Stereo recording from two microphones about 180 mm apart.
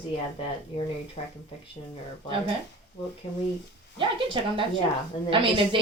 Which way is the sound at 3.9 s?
30° right (ahead or behind).